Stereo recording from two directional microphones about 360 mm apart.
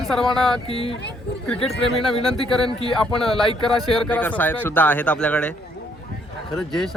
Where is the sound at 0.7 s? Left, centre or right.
Centre.